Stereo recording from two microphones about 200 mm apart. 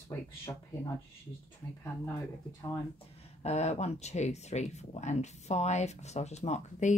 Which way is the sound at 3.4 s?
35° left (ahead or behind).